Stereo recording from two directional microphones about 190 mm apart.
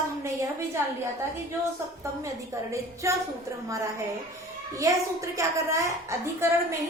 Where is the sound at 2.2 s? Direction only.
15° right (ahead or behind).